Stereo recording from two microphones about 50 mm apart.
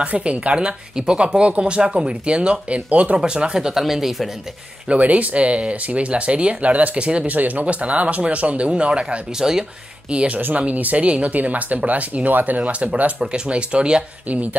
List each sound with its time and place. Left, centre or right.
0.0 s speech: right
3.2 s speech: centre
4.8 s speech: right
7.2 s speech: right
9.4 s speech: centre
10.1 s speech: right